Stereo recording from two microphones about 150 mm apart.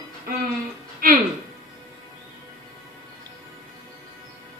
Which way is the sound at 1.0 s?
75° right (ahead or behind).